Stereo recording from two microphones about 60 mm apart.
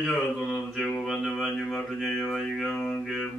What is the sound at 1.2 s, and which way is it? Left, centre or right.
A man's voice, centre.